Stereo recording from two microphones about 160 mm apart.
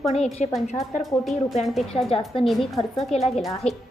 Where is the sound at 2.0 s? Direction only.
35° left (ahead or behind).